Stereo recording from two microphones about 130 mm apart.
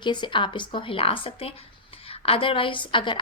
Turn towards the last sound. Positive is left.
turn(degrees=40)  # may be behind; listen again after turning